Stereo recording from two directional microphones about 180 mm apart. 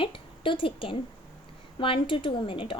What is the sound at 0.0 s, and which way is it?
A woman's voice, 30° left (ahead or behind).